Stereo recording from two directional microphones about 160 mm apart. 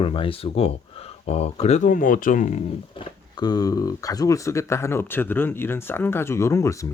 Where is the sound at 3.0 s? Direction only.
30° left (ahead or behind).